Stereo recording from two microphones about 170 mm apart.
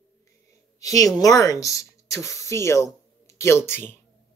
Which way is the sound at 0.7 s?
20° left (ahead or behind).